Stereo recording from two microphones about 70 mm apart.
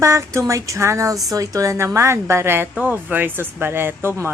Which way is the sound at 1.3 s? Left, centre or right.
Right.